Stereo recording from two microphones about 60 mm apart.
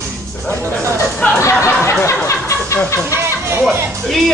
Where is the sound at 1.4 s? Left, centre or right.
Left.